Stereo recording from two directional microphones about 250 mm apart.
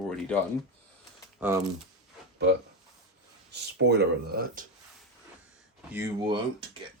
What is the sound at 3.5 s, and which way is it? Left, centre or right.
Speech, right.